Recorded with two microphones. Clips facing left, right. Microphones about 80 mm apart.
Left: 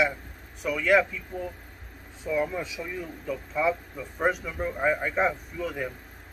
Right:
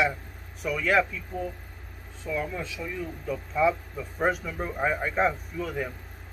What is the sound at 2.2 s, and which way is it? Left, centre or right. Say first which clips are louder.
Speech: left 3 dB; centre.